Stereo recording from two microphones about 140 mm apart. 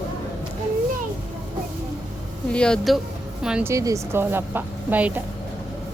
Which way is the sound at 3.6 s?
20° right (ahead or behind).